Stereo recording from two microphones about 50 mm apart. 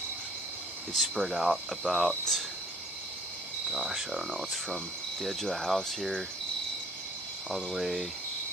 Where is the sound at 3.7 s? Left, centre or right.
Centre.